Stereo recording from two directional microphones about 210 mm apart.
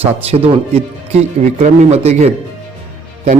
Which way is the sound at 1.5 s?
35° right (ahead or behind).